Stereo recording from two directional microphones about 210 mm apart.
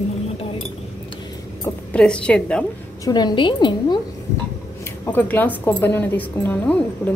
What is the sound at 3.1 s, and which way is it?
Speech, 20° left (ahead or behind).